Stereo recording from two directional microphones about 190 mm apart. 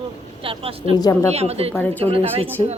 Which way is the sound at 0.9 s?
20° left (ahead or behind).